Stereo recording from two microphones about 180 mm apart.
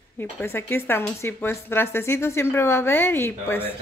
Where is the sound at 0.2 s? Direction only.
15° left (ahead or behind).